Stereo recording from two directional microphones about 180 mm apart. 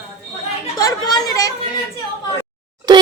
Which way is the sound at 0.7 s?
20° left (ahead or behind).